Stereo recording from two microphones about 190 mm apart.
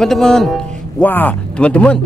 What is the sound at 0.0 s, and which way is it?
Speech, 5° left (ahead or behind).